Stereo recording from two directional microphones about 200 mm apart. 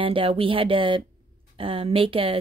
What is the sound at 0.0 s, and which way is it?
Speech, 25° right (ahead or behind).